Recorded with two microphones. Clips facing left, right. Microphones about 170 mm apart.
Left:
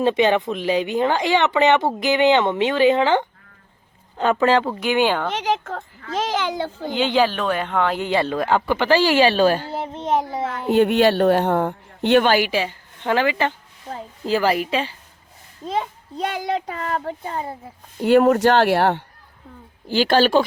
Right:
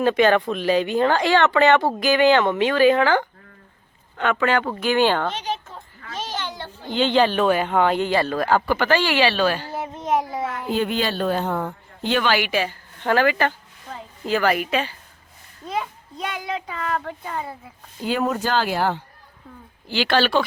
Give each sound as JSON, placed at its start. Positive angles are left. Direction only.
{"t": 0.0, "sound": "speech", "side_deg": 20}
{"t": 4.2, "sound": "a child's voice", "side_deg": 30}
{"t": 4.8, "sound": "speech", "side_deg": 15}
{"t": 5.3, "sound": "a child's voice", "side_deg": 90}
{"t": 6.9, "sound": "speech", "side_deg": 10}
{"t": 7.3, "sound": "speech", "side_deg": -5}
{"t": 8.0, "sound": "speech", "side_deg": 20}
{"t": 9.6, "sound": "a child's voice", "side_deg": 25}
{"t": 10.7, "sound": "speech", "side_deg": 65}
{"t": 12.5, "sound": "a woman's voice", "side_deg": 25}
{"t": 18.0, "sound": "speech", "side_deg": 65}
{"t": 19.9, "sound": "a woman's voice", "side_deg": 45}